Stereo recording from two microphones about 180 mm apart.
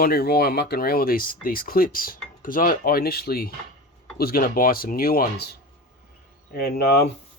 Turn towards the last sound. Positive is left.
turn(degrees=60)  # may be behind; listen again after turning